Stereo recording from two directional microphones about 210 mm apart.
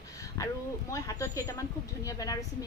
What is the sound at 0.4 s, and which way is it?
A woman's voice, 15° left (ahead or behind).